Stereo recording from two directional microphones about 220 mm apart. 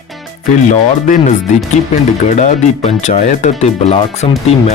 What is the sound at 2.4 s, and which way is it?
Speech, 30° left (ahead or behind).